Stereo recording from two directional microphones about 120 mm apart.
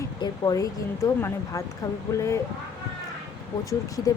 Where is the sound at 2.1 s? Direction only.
25° left (ahead or behind).